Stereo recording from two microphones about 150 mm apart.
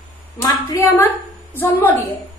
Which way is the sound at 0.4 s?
20° left (ahead or behind).